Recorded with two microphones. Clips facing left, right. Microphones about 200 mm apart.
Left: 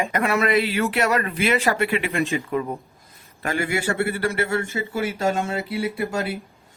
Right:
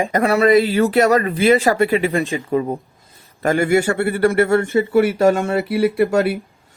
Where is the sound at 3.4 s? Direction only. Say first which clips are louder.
Right 9 dB; 45° right (ahead or behind); by 6.2 s 65° right (ahead or behind).